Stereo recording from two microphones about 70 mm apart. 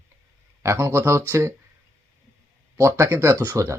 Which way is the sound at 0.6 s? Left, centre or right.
Right.